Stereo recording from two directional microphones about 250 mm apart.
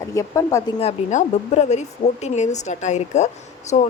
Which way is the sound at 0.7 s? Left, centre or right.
Left.